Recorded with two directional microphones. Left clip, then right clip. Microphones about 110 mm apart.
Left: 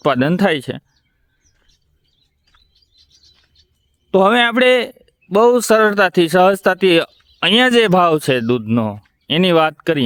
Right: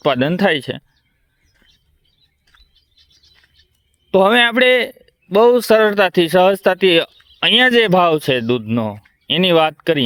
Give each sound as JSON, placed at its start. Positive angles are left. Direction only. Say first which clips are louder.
{"t": 0.0, "sound": "speech", "louder": "even", "side_deg": 45}
{"t": 2.9, "sound": "bird", "louder": "left 1 dB", "side_deg": 15}
{"t": 4.1, "sound": "speech", "louder": "right 1 dB", "side_deg": 25}
{"t": 7.1, "sound": "a sound", "louder": "right 4 dB", "side_deg": 20}
{"t": 7.3, "sound": "speech", "louder": "even", "side_deg": 40}
{"t": 9.2, "sound": "speech", "louder": "even", "side_deg": 30}